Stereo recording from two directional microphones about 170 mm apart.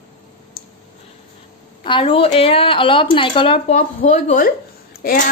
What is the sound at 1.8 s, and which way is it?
A woman's voice, 30° left (ahead or behind).